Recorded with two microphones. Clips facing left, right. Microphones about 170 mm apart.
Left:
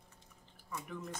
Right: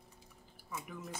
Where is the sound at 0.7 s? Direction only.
5° right (ahead or behind).